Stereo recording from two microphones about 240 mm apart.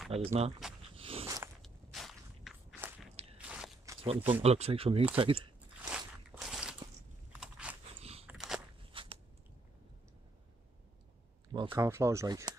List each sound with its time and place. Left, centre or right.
0.1 s speech: right
0.8 s dog: right
1.2 s biting: centre
1.6 s walk: centre
3.3 s biting: centre
4.3 s speech: right
5.9 s crunch: centre
7.3 s biting: centre
8.0 s biting: right
8.3 s biting: centre
8.9 s biting: right
11.5 s speech: centre